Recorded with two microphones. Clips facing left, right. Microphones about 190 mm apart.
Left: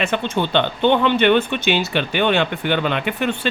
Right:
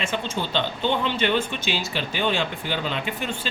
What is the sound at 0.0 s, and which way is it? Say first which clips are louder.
Speech: left 7 dB; 65° left (ahead or behind).